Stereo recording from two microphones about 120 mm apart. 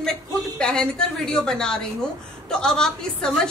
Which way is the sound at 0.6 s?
5° left (ahead or behind).